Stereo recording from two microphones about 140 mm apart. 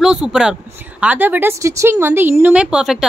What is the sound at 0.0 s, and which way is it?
Speech, 5° right (ahead or behind).